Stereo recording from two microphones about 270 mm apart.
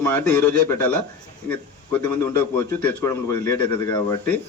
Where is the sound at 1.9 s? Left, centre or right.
Centre.